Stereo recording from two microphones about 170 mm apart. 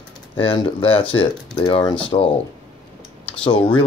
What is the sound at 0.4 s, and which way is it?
Speech, 30° left (ahead or behind).